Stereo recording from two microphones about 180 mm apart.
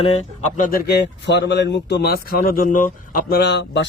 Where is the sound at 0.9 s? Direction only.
70° left (ahead or behind).